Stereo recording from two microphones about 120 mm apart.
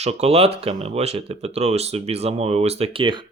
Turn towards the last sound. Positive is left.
turn(degrees=-45)  # may be behind; listen again after turning